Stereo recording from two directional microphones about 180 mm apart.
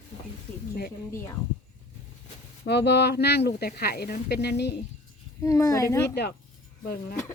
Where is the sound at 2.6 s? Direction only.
70° left (ahead or behind).